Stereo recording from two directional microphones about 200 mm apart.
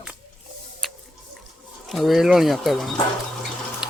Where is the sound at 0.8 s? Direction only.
Centre (ahead or behind).